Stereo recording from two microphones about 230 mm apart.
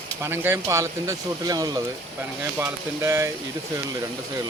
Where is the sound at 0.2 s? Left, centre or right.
Centre.